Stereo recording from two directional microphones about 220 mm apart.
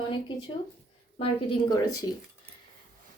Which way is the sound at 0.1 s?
20° left (ahead or behind).